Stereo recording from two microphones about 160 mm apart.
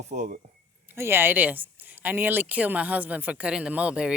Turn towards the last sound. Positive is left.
turn(degrees=-5)  # may be behind; listen again after turning